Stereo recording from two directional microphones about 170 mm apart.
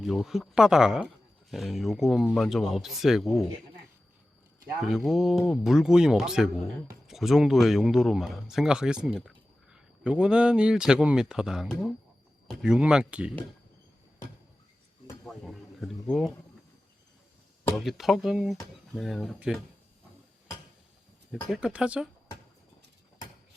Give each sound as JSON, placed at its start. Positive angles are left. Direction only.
{"t": 0.0, "sound": "speech", "side_deg": 0}
{"t": 4.8, "sound": "speech", "side_deg": 0}
{"t": 15.3, "sound": "a sound", "side_deg": 0}
{"t": 17.7, "sound": "speech", "side_deg": 0}
{"t": 21.5, "sound": "speech", "side_deg": -5}